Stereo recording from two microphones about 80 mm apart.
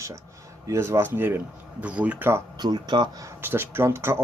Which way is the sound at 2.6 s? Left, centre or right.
Right.